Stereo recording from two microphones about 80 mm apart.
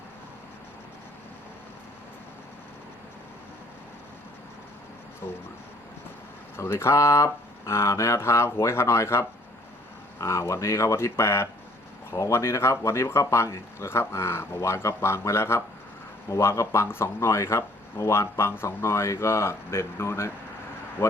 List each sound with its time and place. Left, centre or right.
5.2 s speech: left
6.6 s speech: left